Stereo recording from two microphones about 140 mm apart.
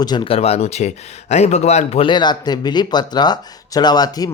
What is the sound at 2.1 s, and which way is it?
Speech, 30° left (ahead or behind).